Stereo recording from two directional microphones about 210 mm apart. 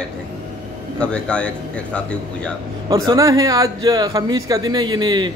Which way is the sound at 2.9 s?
15° right (ahead or behind).